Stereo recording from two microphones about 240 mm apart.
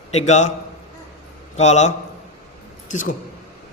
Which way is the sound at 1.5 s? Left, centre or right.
Left.